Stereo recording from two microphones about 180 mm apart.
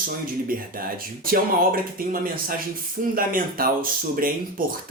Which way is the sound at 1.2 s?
55° right (ahead or behind).